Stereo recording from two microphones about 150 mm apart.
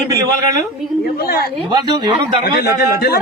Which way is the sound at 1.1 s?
85° left.